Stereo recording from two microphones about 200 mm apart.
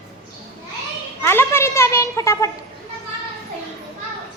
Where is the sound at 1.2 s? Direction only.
10° left (ahead or behind).